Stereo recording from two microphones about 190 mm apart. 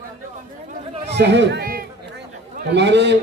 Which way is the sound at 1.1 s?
65° right (ahead or behind).